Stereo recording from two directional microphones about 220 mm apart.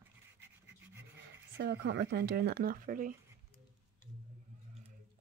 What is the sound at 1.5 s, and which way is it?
Speech, 50° right (ahead or behind).